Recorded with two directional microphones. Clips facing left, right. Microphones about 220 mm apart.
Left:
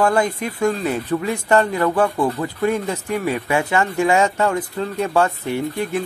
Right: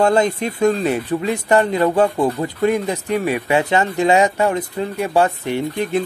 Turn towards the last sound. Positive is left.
turn(degrees=-20)  # may be behind; listen again after turning